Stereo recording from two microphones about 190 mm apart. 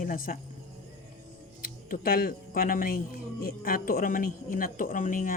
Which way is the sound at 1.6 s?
50° left (ahead or behind).